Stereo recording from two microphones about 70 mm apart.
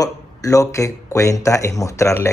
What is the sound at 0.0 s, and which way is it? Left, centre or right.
Speech, left.